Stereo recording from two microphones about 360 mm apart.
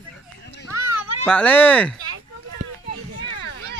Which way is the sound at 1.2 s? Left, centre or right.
Centre.